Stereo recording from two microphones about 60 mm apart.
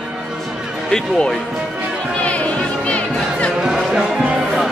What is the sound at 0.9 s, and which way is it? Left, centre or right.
Speech, centre.